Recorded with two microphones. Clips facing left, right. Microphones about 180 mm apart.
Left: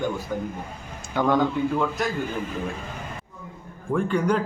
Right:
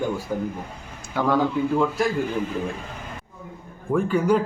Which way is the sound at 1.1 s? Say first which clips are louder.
Left 1 dB; 5° right (ahead or behind).